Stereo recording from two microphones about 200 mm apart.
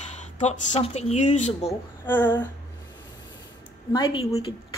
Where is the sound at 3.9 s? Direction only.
25° left (ahead or behind).